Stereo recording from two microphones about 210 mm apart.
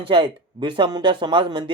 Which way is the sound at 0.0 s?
25° right (ahead or behind).